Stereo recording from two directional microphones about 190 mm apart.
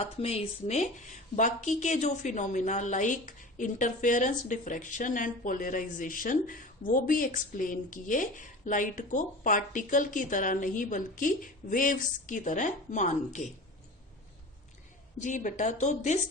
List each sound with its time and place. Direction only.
0.2 s a woman's voice: 35° left (ahead or behind)
15.2 s speech: 40° left (ahead or behind)